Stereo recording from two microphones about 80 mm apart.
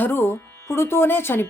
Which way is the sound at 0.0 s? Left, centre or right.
Left.